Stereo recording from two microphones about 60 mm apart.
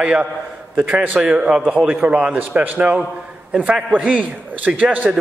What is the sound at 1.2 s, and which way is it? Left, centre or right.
A man's voice, centre.